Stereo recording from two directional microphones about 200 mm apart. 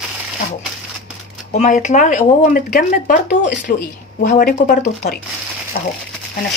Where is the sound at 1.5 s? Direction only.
35° left (ahead or behind).